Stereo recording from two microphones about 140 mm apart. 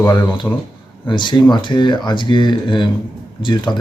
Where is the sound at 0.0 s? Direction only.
15° left (ahead or behind).